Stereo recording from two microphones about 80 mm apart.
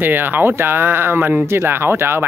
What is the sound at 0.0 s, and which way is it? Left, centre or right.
Speech, right.